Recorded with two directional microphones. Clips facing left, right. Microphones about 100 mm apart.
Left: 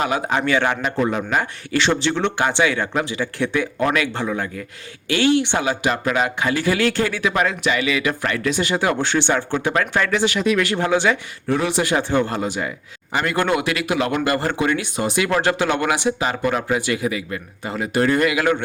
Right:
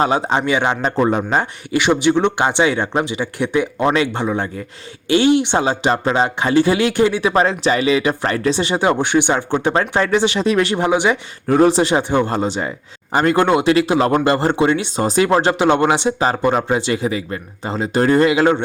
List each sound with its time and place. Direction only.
0.0 s speech: 30° right (ahead or behind)
0.8 s a man's voice: 35° right (ahead or behind)
1.7 s speech: 15° right (ahead or behind)
11.4 s a man's voice: 40° right (ahead or behind)
11.8 s speech: 25° right (ahead or behind)